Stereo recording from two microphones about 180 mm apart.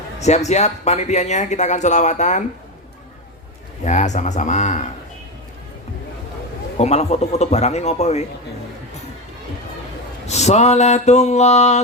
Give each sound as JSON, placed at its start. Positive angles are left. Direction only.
{"t": 0.2, "sound": "speech", "side_deg": 40}
{"t": 3.8, "sound": "speech", "side_deg": 40}
{"t": 6.7, "sound": "speech", "side_deg": 35}
{"t": 10.2, "sound": "speech", "side_deg": 40}